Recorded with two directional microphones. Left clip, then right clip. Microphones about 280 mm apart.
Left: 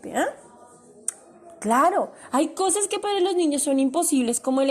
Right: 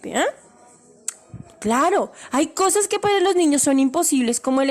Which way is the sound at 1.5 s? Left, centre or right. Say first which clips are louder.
Right 1 dB; right.